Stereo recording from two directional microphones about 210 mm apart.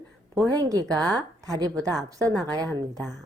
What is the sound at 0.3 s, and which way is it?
A woman's voice, 15° right (ahead or behind).